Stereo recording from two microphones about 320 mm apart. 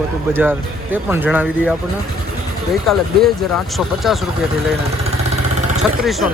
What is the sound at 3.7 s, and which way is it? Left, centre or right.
Speech, centre.